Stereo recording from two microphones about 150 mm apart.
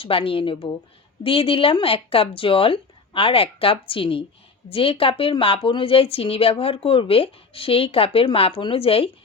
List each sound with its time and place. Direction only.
0.0 s a woman's voice: 35° left (ahead or behind)